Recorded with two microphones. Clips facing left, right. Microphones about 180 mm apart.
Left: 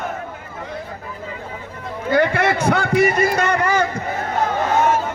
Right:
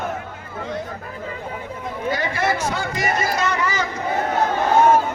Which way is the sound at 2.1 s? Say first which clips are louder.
Left 8 dB; 60° left (ahead or behind).